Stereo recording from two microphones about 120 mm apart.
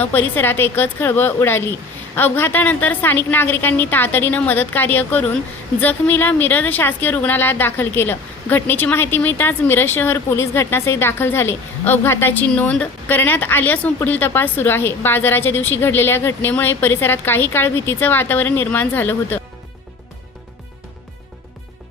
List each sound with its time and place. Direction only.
0.0 s speech: 15° left (ahead or behind)